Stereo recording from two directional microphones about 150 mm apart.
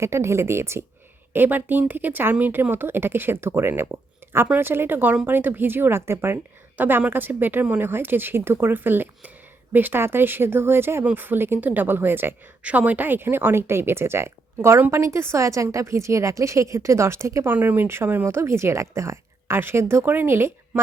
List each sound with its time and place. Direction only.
0.0 s speech: 20° right (ahead or behind)